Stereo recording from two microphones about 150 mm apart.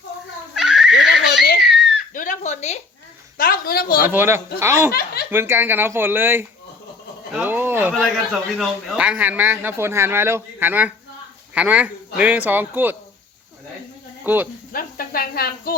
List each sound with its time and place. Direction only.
0.5 s a sound: centre (ahead or behind)
1.4 s laughter: 90° left
1.6 s giggle: centre (ahead or behind)
2.1 s a sound: 60° left (ahead or behind)
3.3 s a woman's voice: 80° left
4.0 s a man's voice: 15° right (ahead or behind)
4.9 s snicker: 90° left
5.3 s a man's voice: 15° right (ahead or behind)
8.3 s a man's voice: centre (ahead or behind)
14.3 s a man's voice: 10° right (ahead or behind)
14.7 s speech: 75° left (ahead or behind)